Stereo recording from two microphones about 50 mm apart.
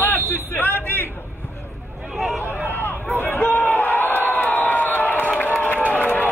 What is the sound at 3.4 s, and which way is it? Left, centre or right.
Crowd, left.